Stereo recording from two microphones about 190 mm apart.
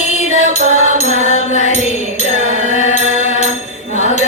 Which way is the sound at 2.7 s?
40° left (ahead or behind).